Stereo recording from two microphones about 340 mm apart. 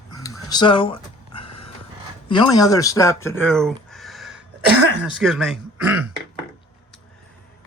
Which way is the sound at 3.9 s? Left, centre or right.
Centre.